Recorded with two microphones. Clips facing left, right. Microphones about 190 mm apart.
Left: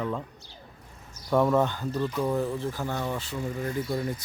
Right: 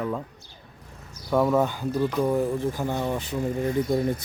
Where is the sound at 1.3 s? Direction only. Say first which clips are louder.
Right 1 dB; 5° right (ahead or behind); by 4.0 s 20° right (ahead or behind).